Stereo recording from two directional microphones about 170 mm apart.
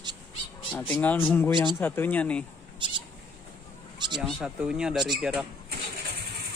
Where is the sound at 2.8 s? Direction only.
30° right (ahead or behind).